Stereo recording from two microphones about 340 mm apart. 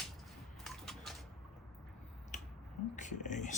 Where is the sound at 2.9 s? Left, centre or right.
Left.